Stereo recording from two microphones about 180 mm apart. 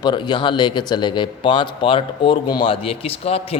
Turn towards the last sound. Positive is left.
turn(degrees=35)  # may be behind; listen again after turning